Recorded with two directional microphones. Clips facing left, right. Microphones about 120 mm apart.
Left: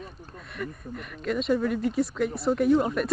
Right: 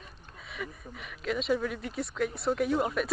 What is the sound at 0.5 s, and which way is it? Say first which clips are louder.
Speech: left 5 dB; centre (ahead or behind).